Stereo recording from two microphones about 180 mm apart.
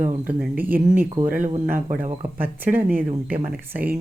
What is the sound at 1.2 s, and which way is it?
Speech, 50° right (ahead or behind).